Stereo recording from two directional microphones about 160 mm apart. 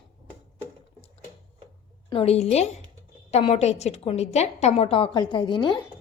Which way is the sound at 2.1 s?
40° left (ahead or behind).